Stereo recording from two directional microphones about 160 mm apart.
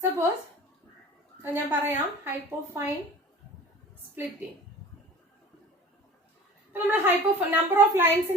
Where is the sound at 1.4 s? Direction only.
15° right (ahead or behind).